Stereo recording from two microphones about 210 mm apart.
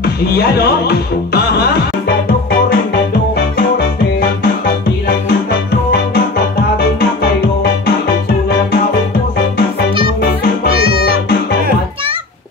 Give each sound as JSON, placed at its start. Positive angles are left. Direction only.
{"t": 0.0, "sound": "speech", "side_deg": 50}
{"t": 3.5, "sound": "music", "side_deg": 50}